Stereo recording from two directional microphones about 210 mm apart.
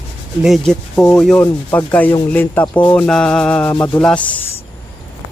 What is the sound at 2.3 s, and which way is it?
Mantra, 10° left (ahead or behind).